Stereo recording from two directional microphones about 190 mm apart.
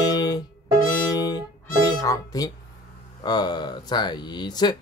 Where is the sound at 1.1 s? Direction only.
20° left (ahead or behind).